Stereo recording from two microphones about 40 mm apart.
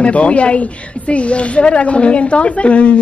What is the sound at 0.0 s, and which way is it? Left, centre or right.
A woman's voice, left.